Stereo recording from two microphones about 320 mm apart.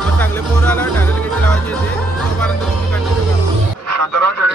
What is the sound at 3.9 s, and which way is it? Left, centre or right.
Music, right.